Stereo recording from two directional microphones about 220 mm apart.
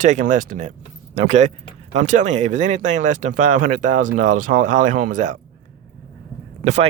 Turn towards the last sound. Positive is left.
turn(degrees=-30)  # may be behind; listen again after turning